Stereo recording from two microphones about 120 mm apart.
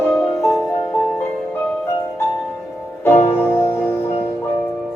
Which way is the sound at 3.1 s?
65° left (ahead or behind).